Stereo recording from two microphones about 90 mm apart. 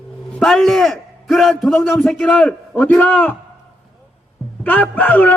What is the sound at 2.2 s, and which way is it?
A man's voice, 15° left (ahead or behind).